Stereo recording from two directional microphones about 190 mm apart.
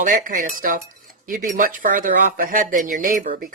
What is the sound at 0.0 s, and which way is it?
Speech, 45° right (ahead or behind).